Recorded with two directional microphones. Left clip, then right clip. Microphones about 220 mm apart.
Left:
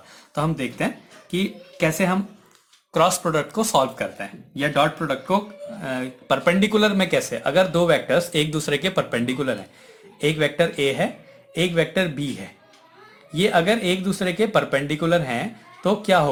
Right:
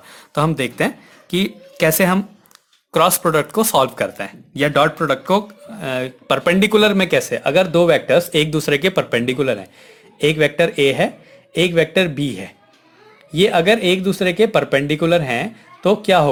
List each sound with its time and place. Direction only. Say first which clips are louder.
0.1 s speech: right 6 dB; 45° right (ahead or behind)